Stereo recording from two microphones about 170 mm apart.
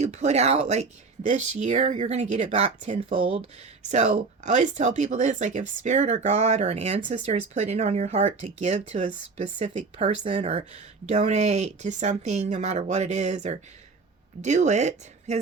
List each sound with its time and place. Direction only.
0.0 s speech: 40° right (ahead or behind)